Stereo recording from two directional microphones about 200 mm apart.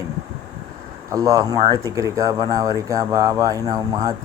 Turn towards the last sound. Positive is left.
turn(degrees=-20)  # may be behind; listen again after turning